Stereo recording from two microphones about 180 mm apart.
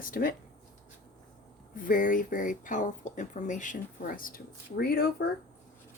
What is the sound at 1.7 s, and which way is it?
Speech, 50° left (ahead or behind).